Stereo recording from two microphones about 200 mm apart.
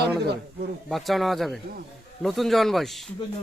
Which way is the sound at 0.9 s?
Centre (ahead or behind).